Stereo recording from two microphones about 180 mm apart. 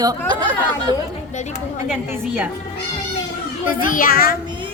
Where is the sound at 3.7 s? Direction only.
50° left (ahead or behind).